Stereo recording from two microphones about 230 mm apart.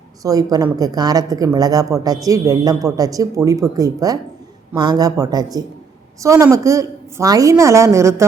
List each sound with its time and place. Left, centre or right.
0.2 s speech: centre